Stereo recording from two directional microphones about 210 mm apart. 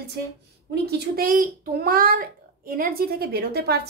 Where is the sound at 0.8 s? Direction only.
45° right (ahead or behind).